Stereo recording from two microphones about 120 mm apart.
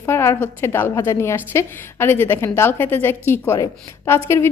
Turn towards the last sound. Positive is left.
turn(degrees=20)  # may be behind; listen again after turning